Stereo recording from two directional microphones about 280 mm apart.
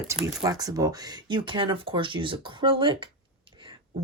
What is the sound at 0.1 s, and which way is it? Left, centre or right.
Speech, centre.